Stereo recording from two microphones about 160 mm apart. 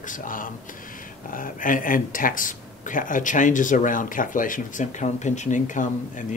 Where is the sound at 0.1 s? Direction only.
60° left (ahead or behind).